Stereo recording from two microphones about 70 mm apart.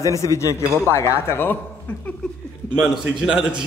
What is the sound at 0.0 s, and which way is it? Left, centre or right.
Speech, left.